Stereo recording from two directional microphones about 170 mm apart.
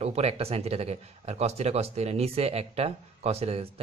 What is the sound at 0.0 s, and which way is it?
Speech, 40° right (ahead or behind).